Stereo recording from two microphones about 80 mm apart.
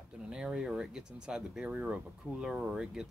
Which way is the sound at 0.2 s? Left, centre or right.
Centre.